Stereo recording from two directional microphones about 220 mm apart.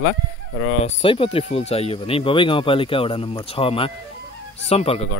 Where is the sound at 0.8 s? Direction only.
25° left (ahead or behind).